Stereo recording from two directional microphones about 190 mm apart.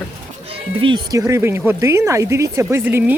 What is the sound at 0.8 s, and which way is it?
Speech, 20° right (ahead or behind).